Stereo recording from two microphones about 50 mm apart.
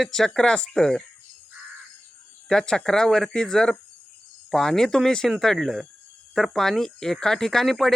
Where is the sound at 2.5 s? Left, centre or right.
Centre.